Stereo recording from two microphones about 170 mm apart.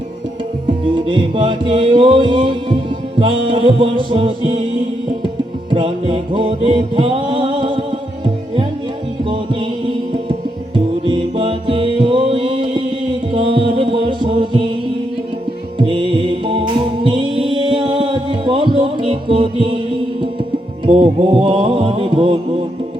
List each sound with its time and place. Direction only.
0.7 s music: 30° right (ahead or behind)
5.7 s music: 35° right (ahead or behind)
15.8 s music: 30° right (ahead or behind)
20.8 s music: 30° right (ahead or behind)